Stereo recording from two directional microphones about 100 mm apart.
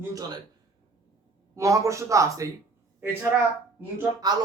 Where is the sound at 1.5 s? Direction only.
30° right (ahead or behind).